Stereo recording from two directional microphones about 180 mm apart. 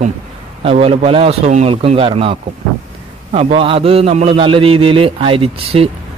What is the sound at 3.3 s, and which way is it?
A man's voice, 30° right (ahead or behind).